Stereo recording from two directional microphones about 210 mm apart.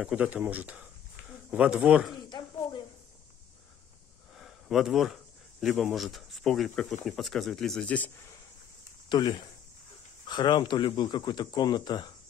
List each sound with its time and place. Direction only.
0.0 s speech: 5° right (ahead or behind)
2.2 s a sound: 20° left (ahead or behind)
4.4 s speech: centre (ahead or behind); by 12.1 s 20° left (ahead or behind)